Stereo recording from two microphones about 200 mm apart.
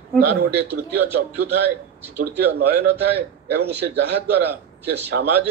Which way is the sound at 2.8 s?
55° right (ahead or behind).